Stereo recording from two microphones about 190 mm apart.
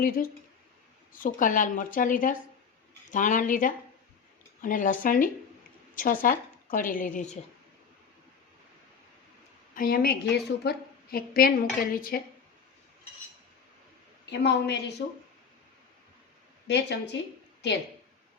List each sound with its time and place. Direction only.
0.0 s a woman's voice: 50° left (ahead or behind)
9.7 s a woman's voice: 50° left (ahead or behind)
14.3 s a woman's voice: 60° left (ahead or behind)
16.6 s a woman's voice: 65° left (ahead or behind)